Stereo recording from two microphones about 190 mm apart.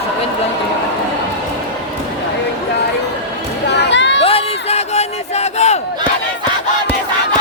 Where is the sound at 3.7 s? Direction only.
65° left (ahead or behind).